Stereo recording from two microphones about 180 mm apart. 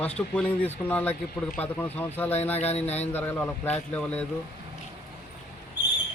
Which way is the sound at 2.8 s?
35° left (ahead or behind).